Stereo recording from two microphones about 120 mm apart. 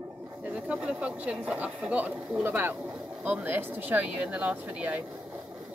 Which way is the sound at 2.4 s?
20° right (ahead or behind).